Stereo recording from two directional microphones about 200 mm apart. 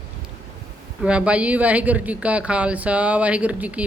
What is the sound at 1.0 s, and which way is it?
Speech, 5° right (ahead or behind).